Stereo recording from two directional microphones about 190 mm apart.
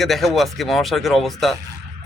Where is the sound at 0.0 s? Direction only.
Centre (ahead or behind).